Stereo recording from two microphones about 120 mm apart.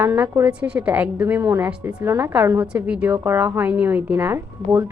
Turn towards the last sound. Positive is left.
turn(degrees=-20)  # may be behind; listen again after turning